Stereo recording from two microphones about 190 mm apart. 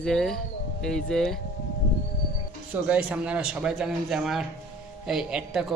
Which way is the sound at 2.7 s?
5° right (ahead or behind).